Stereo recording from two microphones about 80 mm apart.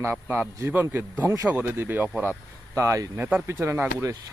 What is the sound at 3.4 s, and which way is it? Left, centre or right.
Speech, right.